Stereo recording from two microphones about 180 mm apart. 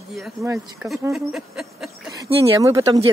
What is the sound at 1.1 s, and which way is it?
Speech, centre (ahead or behind).